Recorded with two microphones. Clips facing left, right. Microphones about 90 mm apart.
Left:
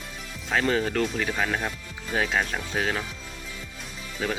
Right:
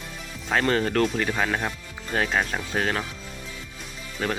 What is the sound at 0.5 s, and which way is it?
Speech, centre (ahead or behind).